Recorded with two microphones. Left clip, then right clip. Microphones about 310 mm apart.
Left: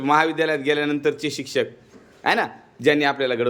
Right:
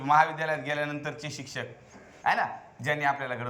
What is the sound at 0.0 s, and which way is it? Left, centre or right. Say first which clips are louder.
A man's voice: left 5 dB; centre.